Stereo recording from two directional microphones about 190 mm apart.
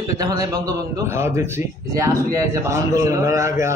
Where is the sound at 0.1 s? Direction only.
20° right (ahead or behind).